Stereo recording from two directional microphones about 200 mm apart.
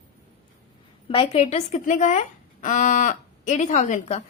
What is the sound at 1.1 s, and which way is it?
A woman's voice, 30° left (ahead or behind).